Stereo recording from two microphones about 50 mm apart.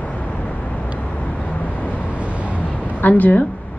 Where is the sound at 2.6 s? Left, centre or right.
Left.